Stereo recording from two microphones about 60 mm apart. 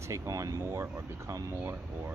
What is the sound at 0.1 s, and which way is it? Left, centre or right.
Speech, right.